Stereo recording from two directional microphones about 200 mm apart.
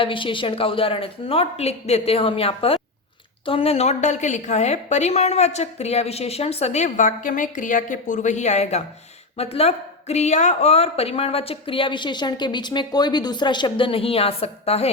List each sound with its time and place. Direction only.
0.0 s a woman's voice: 25° left (ahead or behind)